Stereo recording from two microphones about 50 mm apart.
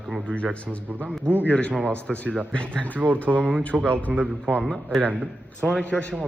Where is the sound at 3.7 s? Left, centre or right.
Centre.